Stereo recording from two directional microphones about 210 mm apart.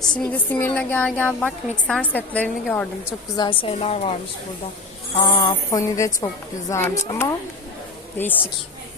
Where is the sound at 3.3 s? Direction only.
25° left (ahead or behind).